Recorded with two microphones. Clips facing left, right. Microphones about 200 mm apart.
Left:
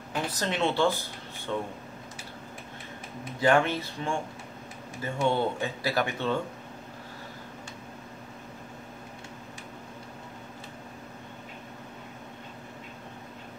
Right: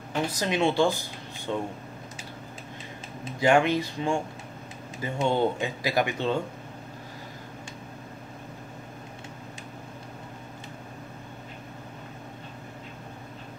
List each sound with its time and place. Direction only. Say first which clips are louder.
0.3 s speech: right 3 dB; 10° right (ahead or behind)
3.3 s speech: right 2 dB; 15° right (ahead or behind)